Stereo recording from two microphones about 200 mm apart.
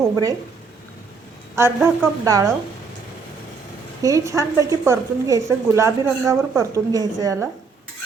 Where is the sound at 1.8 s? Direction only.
15° right (ahead or behind).